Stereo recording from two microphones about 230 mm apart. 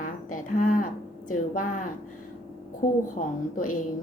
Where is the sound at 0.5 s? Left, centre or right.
Left.